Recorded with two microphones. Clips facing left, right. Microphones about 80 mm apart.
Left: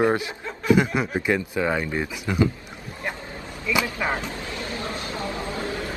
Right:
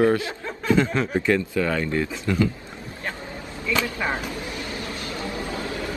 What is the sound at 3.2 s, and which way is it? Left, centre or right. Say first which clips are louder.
Vehicle: right 1 dB; right.